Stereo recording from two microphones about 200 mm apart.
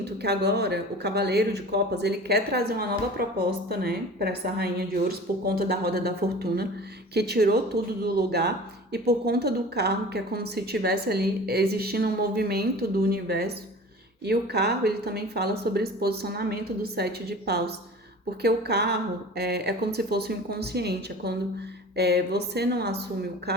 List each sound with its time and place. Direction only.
0.0 s a woman's voice: 55° right (ahead or behind)